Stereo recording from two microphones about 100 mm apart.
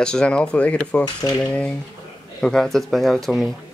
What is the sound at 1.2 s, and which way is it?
Cutlery, 40° left (ahead or behind).